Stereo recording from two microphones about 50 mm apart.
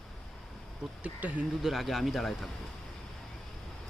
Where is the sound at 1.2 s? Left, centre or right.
Right.